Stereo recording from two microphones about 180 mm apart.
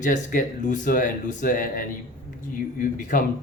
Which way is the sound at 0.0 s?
45° left (ahead or behind).